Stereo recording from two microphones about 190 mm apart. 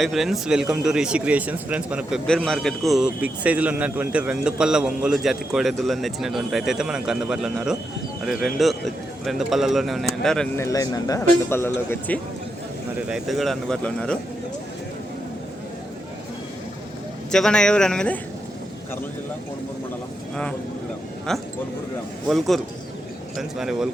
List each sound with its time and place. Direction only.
0.0 s speech: centre (ahead or behind)
10.6 s speech: 15° left (ahead or behind)
17.3 s speech: 5° left (ahead or behind)
21.3 s speech: centre (ahead or behind)